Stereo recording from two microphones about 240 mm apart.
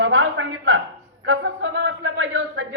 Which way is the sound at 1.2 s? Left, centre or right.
Right.